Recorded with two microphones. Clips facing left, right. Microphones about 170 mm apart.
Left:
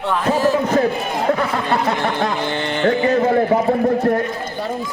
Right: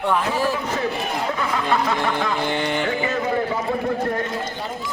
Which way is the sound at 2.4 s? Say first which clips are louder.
Left 2 dB; 15° right (ahead or behind).